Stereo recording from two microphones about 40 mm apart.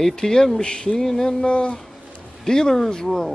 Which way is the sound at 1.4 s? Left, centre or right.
Left.